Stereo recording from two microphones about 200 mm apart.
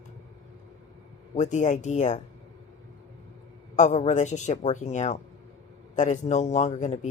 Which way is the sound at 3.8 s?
35° left (ahead or behind).